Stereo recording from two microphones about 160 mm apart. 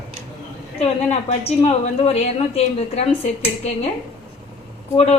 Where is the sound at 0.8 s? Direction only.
40° left (ahead or behind).